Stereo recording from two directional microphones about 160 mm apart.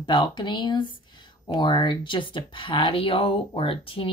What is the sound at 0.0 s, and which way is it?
Speech, 30° left (ahead or behind).